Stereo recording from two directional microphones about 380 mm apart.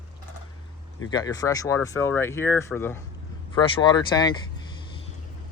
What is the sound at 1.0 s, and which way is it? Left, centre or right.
Speech, centre.